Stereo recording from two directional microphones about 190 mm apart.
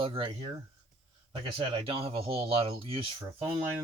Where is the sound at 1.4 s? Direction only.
25° right (ahead or behind).